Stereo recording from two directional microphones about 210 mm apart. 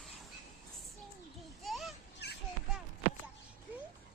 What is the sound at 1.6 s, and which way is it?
Children playing, centre (ahead or behind).